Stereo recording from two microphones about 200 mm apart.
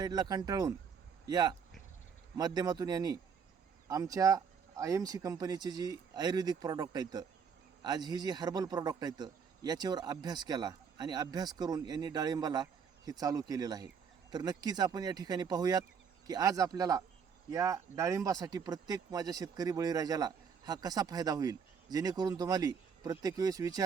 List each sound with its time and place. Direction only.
0.0 s a man's voice: 20° right (ahead or behind)